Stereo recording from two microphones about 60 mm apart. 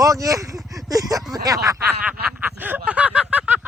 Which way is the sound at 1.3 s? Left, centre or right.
Right.